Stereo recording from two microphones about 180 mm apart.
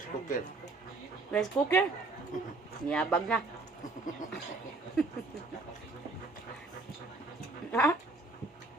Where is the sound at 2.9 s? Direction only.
5° left (ahead or behind).